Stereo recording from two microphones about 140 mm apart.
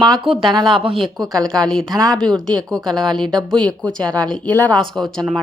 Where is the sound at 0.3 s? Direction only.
35° right (ahead or behind).